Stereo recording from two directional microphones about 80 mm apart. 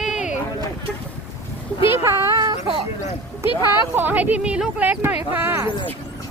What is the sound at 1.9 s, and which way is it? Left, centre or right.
Speech, right.